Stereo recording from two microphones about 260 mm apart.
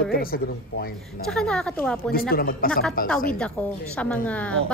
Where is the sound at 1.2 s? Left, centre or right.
Centre.